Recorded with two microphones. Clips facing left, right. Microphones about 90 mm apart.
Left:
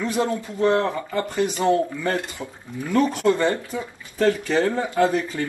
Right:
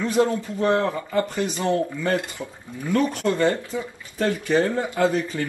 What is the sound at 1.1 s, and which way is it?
Speech, 20° left (ahead or behind).